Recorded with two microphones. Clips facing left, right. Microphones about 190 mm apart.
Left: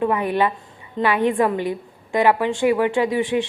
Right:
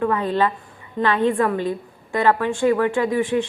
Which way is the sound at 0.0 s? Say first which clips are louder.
Even; 15° left (ahead or behind).